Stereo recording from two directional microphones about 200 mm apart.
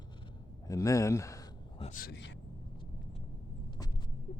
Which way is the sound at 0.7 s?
15° left (ahead or behind).